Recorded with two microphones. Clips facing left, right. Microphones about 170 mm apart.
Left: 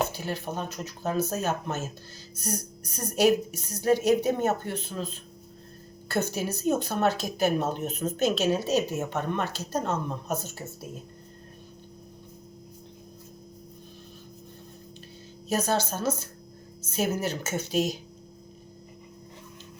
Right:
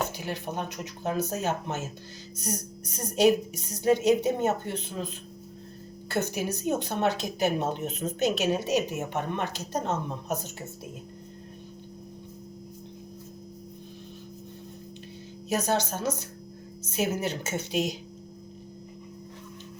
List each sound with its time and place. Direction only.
0.1 s a woman's voice: 15° right (ahead or behind)
6.1 s a woman's voice: 15° right (ahead or behind)
15.5 s a woman's voice: 15° right (ahead or behind)